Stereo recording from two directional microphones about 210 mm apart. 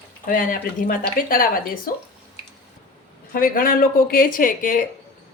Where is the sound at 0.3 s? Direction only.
45° left (ahead or behind).